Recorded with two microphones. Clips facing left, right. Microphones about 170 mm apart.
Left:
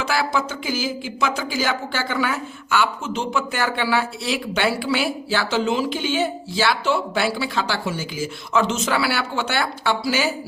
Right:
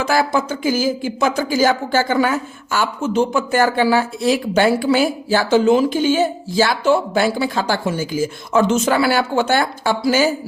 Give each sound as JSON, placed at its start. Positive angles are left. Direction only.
{"t": 0.0, "sound": "speech", "side_deg": -45}